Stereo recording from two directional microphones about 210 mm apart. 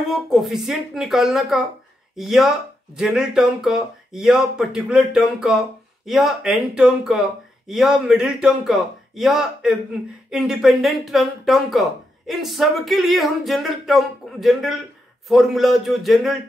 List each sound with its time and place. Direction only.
0.0 s speech: centre (ahead or behind)